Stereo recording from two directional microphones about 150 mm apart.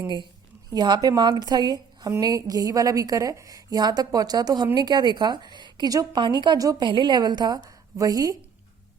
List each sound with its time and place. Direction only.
0.7 s a woman's voice: 25° right (ahead or behind)